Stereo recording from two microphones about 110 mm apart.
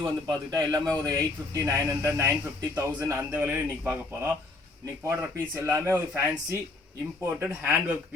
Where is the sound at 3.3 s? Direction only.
15° right (ahead or behind).